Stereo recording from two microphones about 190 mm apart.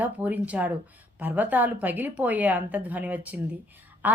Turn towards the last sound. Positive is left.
turn(degrees=-10)  # may be behind; listen again after turning